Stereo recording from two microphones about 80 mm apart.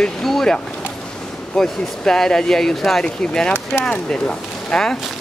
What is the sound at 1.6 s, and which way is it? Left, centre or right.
Speech, centre.